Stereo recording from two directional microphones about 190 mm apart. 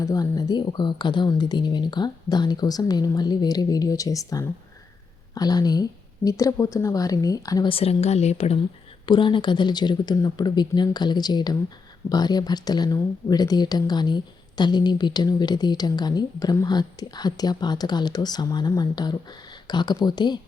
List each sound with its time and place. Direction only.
0.0 s speech: 20° left (ahead or behind)